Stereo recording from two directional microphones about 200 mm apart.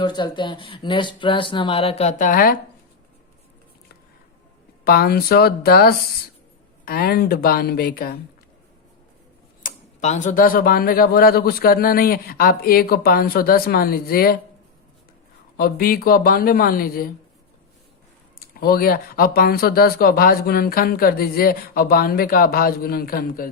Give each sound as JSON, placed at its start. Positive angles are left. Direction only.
{"t": 0.0, "sound": "speech", "side_deg": 20}
{"t": 4.9, "sound": "speech", "side_deg": 50}
{"t": 9.6, "sound": "speech", "side_deg": 35}
{"t": 15.5, "sound": "speech", "side_deg": 45}
{"t": 18.3, "sound": "speech", "side_deg": 45}